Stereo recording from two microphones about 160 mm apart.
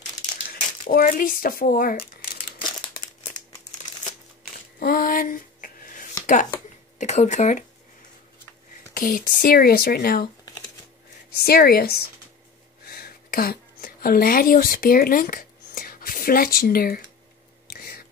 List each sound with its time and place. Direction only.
0.5 s speech: 65° left (ahead or behind)
2.6 s crumpling: 30° left (ahead or behind)
4.7 s a sound: 65° left (ahead or behind)
7.0 s speech: 50° left (ahead or behind)
8.9 s speech: 55° left (ahead or behind)
11.4 s speech: 75° left (ahead or behind)
12.8 s a sound: 75° left (ahead or behind)